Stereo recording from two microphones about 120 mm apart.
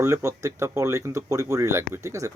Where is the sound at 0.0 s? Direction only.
25° right (ahead or behind).